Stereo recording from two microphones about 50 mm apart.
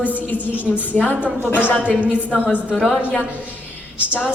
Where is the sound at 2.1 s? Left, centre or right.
Right.